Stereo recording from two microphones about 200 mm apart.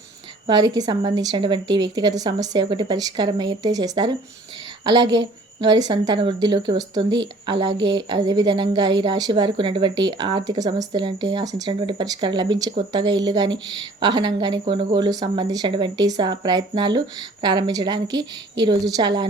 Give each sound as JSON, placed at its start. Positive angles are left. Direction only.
{"t": 0.4, "sound": "a woman's voice", "side_deg": -20}
{"t": 7.8, "sound": "speech", "side_deg": -65}
{"t": 8.1, "sound": "a woman's voice", "side_deg": -20}